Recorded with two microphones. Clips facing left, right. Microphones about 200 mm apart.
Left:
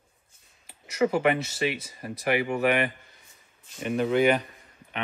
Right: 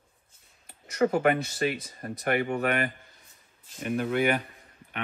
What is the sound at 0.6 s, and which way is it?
Speech, 5° left (ahead or behind).